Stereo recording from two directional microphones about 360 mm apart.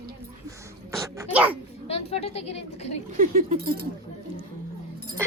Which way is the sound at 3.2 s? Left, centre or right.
Right.